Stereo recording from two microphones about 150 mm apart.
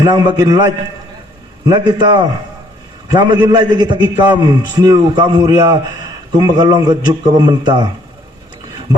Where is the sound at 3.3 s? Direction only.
30° right (ahead or behind).